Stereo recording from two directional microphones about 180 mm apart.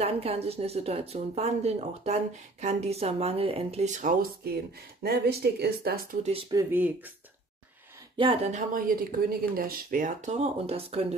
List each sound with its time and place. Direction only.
0.0 s a woman's voice: 35° right (ahead or behind)
5.0 s speech: 65° right (ahead or behind)
6.5 s speech: 15° right (ahead or behind)
8.2 s speech: 35° right (ahead or behind)